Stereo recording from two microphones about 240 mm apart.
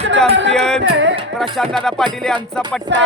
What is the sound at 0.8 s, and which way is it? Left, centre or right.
Speech, right.